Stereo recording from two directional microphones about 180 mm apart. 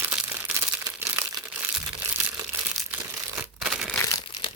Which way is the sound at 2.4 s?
10° right (ahead or behind).